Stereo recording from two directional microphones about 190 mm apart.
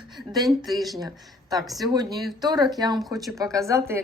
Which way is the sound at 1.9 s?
20° right (ahead or behind).